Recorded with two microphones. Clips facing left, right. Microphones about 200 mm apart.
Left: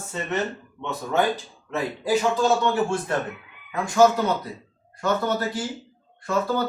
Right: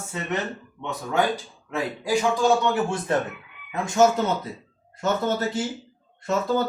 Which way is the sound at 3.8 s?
20° right (ahead or behind).